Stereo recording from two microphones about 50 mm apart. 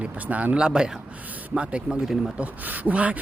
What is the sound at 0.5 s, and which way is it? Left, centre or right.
A man's voice, centre.